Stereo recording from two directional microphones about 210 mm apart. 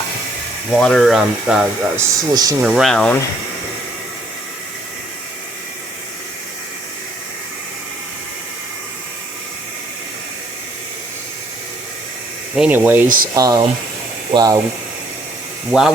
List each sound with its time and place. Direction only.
0.8 s speech: centre (ahead or behind)
2.3 s speech: 20° right (ahead or behind)
2.6 s speech: centre (ahead or behind)
12.5 s speech: 5° right (ahead or behind)
13.1 s speech: 40° right (ahead or behind)
13.3 s speech: 15° right (ahead or behind)
15.7 s speech: 5° right (ahead or behind)